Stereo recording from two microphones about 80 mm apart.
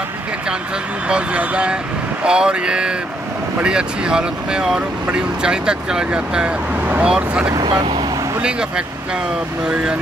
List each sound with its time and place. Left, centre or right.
1.0 s speech: centre
7.5 s speech: right
8.4 s speech: centre